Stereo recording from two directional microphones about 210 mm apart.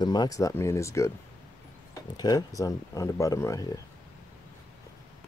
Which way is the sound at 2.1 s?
20° left (ahead or behind).